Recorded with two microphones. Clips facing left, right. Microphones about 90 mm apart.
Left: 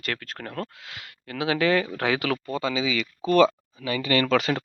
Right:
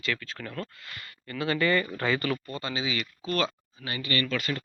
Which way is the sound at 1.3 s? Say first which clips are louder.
Left 3 dB; 70° left (ahead or behind).